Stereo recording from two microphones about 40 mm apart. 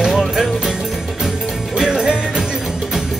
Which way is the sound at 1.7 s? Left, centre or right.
Centre.